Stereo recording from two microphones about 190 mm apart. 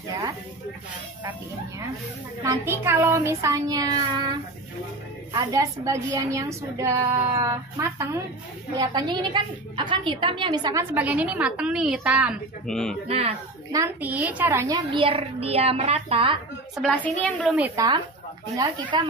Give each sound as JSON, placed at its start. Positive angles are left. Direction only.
{"t": 2.4, "sound": "a woman's voice", "side_deg": -15}
{"t": 5.3, "sound": "a woman's voice", "side_deg": -20}
{"t": 13.7, "sound": "a woman's voice", "side_deg": -15}
{"t": 15.0, "sound": "a woman's voice", "side_deg": -30}
{"t": 16.8, "sound": "a woman's voice", "side_deg": 5}
{"t": 18.6, "sound": "speech", "side_deg": -25}